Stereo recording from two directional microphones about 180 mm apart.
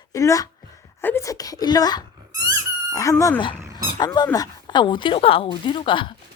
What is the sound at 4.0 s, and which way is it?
A woman's voice, 25° left (ahead or behind).